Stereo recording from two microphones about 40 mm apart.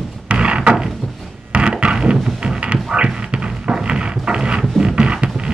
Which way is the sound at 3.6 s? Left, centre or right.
Right.